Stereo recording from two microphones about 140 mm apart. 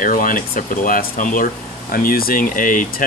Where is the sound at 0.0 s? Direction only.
70° left (ahead or behind).